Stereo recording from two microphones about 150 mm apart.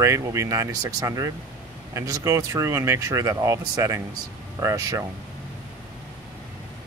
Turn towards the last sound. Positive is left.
turn(degrees=-20)  # may be behind; listen again after turning